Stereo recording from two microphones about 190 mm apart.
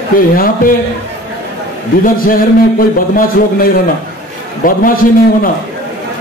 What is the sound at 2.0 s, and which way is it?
A man's voice, 45° left (ahead or behind).